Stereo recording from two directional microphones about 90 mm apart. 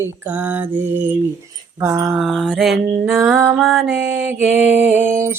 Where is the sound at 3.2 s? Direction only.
20° right (ahead or behind).